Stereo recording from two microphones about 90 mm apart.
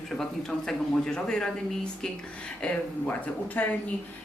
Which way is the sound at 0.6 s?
5° left (ahead or behind).